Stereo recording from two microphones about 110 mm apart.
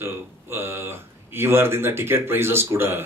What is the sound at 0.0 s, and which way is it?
Speech, 20° right (ahead or behind).